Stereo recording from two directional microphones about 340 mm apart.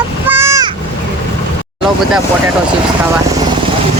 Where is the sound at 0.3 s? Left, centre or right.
Centre.